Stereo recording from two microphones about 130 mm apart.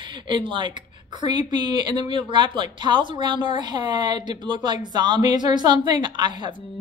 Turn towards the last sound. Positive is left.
turn(degrees=-35)  # may be behind; listen again after turning